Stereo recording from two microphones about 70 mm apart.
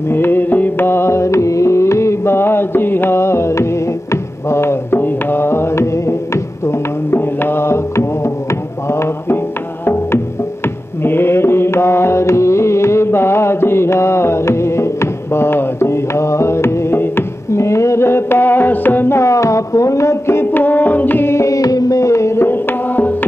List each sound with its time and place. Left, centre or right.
0.1 s music: left